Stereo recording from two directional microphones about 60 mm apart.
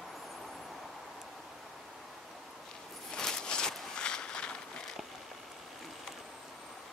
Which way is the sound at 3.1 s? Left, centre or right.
Centre.